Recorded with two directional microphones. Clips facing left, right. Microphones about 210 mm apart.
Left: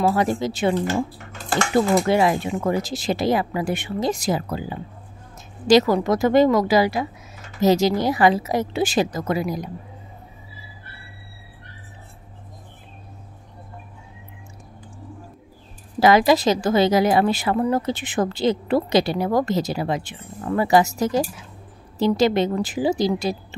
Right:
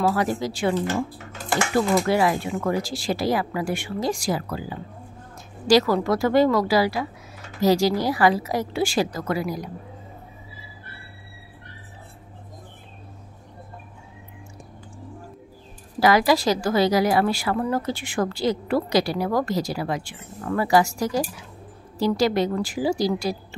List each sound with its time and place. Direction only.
0.1 s a woman's voice: 25° left (ahead or behind)
16.0 s a woman's voice: 20° left (ahead or behind)